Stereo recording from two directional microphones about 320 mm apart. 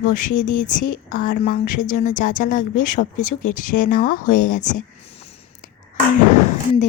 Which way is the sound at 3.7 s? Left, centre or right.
Left.